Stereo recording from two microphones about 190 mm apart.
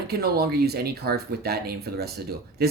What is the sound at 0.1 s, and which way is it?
Speech, 55° right (ahead or behind).